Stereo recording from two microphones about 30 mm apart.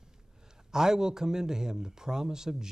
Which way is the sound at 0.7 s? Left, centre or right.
Right.